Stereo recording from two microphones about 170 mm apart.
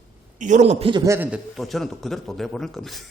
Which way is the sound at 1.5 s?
Centre (ahead or behind).